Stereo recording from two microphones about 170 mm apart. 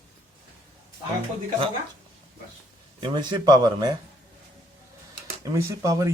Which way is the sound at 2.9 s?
25° right (ahead or behind).